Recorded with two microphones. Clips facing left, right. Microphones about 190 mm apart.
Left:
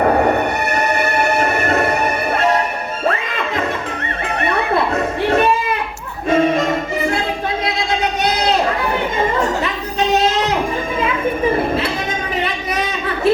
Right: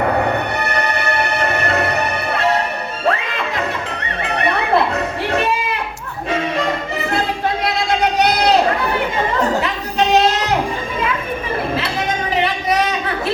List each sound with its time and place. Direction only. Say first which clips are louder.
1.6 s music: left 2 dB; 50° left (ahead or behind)
6.3 s music: left 6 dB; 50° left (ahead or behind)